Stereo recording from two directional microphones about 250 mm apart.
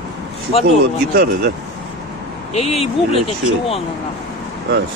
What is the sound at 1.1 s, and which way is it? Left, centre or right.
Speech, right.